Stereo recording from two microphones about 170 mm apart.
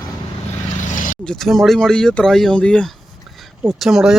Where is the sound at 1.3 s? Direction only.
Centre (ahead or behind).